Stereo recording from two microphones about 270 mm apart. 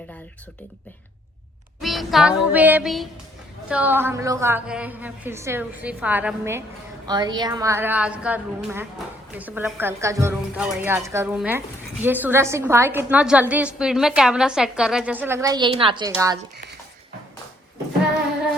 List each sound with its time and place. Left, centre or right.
1.8 s speech: centre
2.5 s music: centre
3.7 s a woman's voice: centre